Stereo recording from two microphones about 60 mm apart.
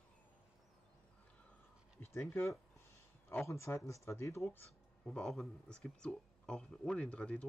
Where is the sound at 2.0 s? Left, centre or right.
Left.